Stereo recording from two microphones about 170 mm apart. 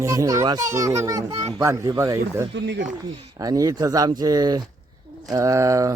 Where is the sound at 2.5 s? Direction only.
90° right.